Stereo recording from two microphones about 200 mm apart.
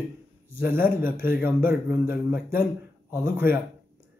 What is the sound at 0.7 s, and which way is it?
A man's voice, 10° right (ahead or behind).